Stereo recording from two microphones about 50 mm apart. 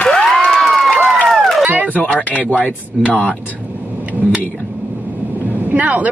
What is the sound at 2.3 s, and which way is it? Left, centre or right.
Speech, left.